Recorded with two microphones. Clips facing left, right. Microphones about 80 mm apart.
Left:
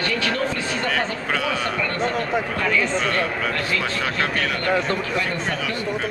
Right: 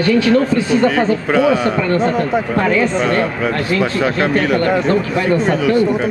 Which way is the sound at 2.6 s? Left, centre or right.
Right.